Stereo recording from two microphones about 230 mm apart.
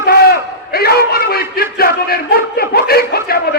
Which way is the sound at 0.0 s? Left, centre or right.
Left.